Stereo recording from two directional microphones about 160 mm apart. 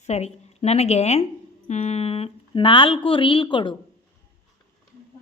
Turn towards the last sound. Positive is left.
turn(degrees=30)  # may be behind; listen again after turning